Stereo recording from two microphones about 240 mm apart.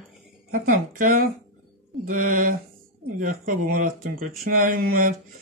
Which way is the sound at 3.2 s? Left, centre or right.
Right.